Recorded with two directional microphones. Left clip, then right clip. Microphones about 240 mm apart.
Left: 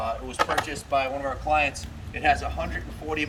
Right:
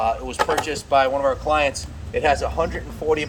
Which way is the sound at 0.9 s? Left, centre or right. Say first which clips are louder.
Right 9 dB; centre.